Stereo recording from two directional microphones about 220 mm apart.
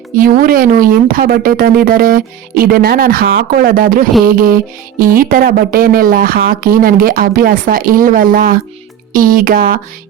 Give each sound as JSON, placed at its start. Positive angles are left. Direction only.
{"t": 0.2, "sound": "music", "side_deg": -40}